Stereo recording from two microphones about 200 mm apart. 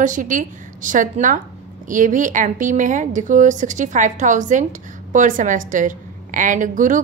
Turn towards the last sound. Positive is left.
turn(degrees=-40)  # may be behind; listen again after turning